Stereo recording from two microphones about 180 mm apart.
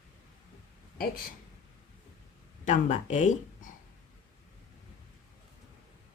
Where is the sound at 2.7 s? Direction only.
40° left (ahead or behind).